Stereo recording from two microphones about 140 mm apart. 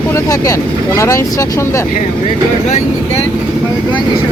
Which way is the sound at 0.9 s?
25° left (ahead or behind).